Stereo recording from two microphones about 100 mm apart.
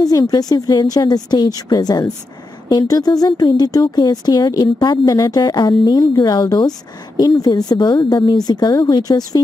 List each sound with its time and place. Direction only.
0.0 s a woman's voice: 40° left (ahead or behind)
5.1 s a woman's voice: 35° left (ahead or behind)
5.4 s speech: 45° left (ahead or behind)